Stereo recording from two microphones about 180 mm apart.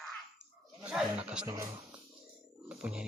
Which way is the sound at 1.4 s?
15° right (ahead or behind).